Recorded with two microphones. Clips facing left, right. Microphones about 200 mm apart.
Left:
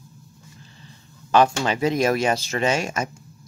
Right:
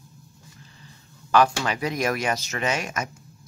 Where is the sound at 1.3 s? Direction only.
25° left (ahead or behind).